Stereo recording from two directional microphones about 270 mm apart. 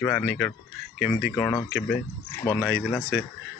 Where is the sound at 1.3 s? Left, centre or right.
Centre.